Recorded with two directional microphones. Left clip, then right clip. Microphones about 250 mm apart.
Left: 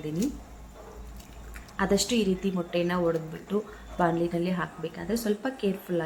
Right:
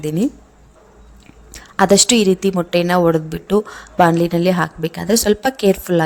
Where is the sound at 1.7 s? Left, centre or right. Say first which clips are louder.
Right 14 dB; right.